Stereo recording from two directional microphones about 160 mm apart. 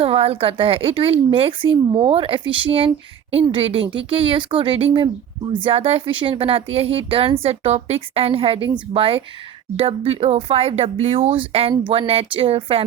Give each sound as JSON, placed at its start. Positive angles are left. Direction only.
{"t": 0.0, "sound": "speech", "side_deg": -35}